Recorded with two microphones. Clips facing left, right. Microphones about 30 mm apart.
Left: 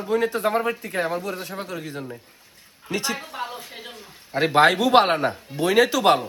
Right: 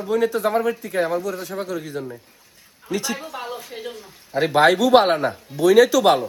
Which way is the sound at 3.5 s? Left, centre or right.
Left.